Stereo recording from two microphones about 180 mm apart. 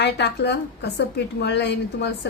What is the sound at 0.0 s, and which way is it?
A woman's voice, 70° left (ahead or behind).